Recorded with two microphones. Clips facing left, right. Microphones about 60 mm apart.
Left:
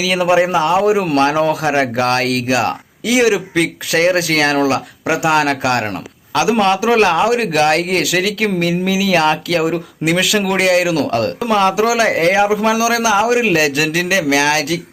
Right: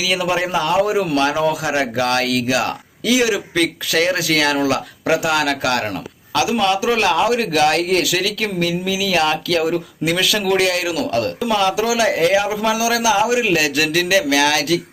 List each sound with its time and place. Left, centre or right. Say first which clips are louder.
0.0 s speech: left 5 dB; left
0.3 s a man's voice: left 4 dB; left
5.0 s a man's voice: left 3 dB; left